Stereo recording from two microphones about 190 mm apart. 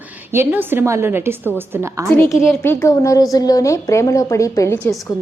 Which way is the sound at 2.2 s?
Centre (ahead or behind).